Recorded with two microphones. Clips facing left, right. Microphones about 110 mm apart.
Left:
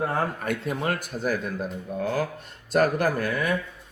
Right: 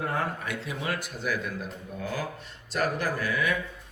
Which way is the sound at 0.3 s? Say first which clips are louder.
Left 6 dB; 50° left (ahead or behind).